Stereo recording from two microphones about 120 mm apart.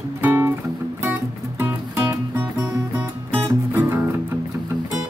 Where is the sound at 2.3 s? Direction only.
15° right (ahead or behind).